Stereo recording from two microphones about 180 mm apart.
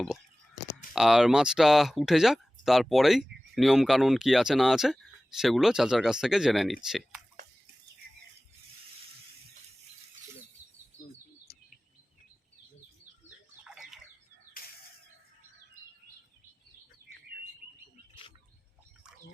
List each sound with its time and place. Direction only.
0.0 s a sound: centre (ahead or behind)
0.9 s speech: centre (ahead or behind)
11.5 s bird: 60° left (ahead or behind)
13.7 s bird: 5° right (ahead or behind)
14.6 s bird: 55° left (ahead or behind)